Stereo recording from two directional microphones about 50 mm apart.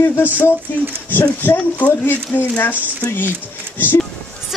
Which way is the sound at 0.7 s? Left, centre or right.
Left.